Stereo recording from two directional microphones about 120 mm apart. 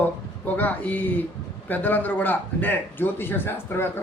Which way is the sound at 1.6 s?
15° left (ahead or behind).